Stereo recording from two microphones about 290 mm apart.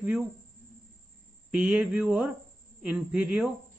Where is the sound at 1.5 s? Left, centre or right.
Centre.